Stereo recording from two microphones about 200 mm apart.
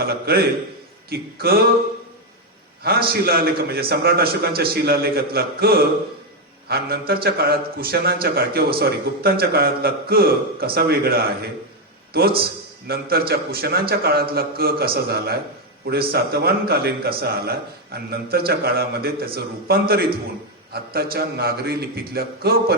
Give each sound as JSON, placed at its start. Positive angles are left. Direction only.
{"t": 0.0, "sound": "a man's voice", "side_deg": -50}
{"t": 2.8, "sound": "a man's voice", "side_deg": -50}
{"t": 12.9, "sound": "a man's voice", "side_deg": -50}